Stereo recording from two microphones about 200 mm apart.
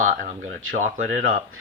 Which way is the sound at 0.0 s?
35° right (ahead or behind).